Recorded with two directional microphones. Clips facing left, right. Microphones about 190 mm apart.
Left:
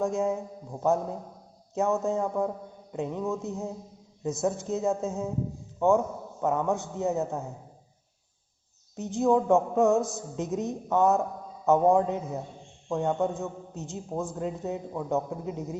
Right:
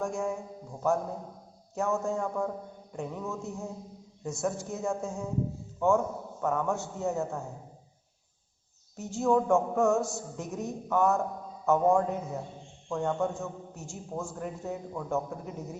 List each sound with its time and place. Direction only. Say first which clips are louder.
0.0 s a man's voice: left 5 dB; 20° left (ahead or behind)
1.7 s a man's voice: left 3 dB; 20° left (ahead or behind)
6.4 s a man's voice: left 3 dB; 20° left (ahead or behind)
9.0 s a man's voice: left 2 dB; 15° left (ahead or behind)